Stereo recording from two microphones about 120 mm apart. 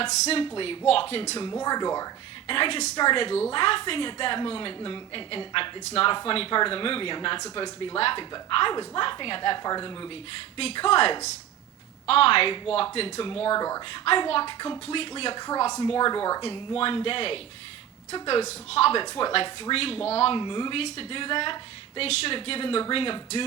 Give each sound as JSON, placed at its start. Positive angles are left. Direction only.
{"t": 0.0, "sound": "a woman's voice", "side_deg": 50}
{"t": 1.4, "sound": "speech", "side_deg": 35}
{"t": 2.5, "sound": "a woman's voice", "side_deg": 50}
{"t": 10.6, "sound": "a woman's voice", "side_deg": 55}
{"t": 13.6, "sound": "speech", "side_deg": 30}
{"t": 13.9, "sound": "a woman's voice", "side_deg": 50}
{"t": 16.4, "sound": "a woman's voice", "side_deg": 50}
{"t": 19.0, "sound": "a woman's voice", "side_deg": 45}
{"t": 20.4, "sound": "a woman's voice", "side_deg": 40}